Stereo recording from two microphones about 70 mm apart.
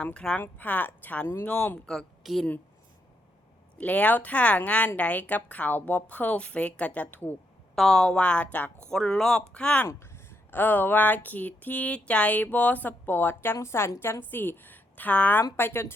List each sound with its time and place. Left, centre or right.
0.0 s a woman's voice: centre
2.2 s a woman's voice: centre
3.8 s speech: left
7.8 s a woman's voice: centre
8.9 s a woman's voice: centre
9.5 s a woman's voice: centre
9.8 s speech: left